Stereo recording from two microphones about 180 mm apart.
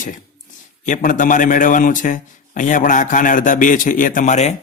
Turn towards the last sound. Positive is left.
turn(degrees=40)  # may be behind; listen again after turning